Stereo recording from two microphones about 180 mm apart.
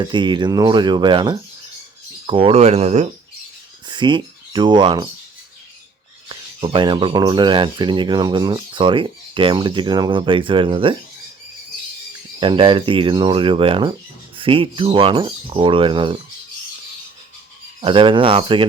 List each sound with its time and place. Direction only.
0.0 s speech: 25° right (ahead or behind)
3.8 s speech: 25° right (ahead or behind)
6.2 s speech: 25° right (ahead or behind)
12.4 s speech: 30° right (ahead or behind)
17.7 s speech: 30° right (ahead or behind)